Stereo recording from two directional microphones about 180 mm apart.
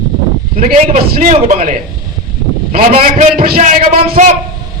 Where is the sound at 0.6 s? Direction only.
45° right (ahead or behind).